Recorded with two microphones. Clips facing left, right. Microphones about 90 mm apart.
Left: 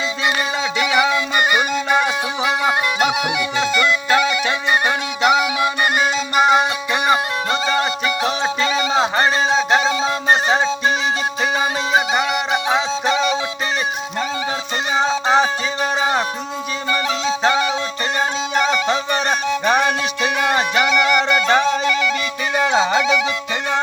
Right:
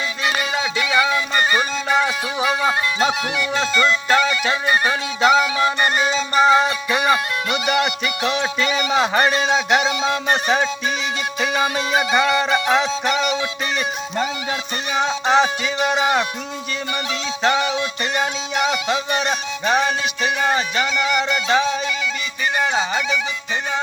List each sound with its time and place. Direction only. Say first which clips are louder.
0.8 s music: left 2 dB; 20° left (ahead or behind)
3.6 s music: left 1 dB; 5° left (ahead or behind)
6.4 s music: even; 15° left (ahead or behind)
7.5 s music: even; 35° left (ahead or behind)
14.9 s music: left 1 dB; 30° left (ahead or behind); by 20.0 s 55° left (ahead or behind)
20.4 s music: left 3 dB; 65° left (ahead or behind)
22.7 s music: left 5 dB; 90° left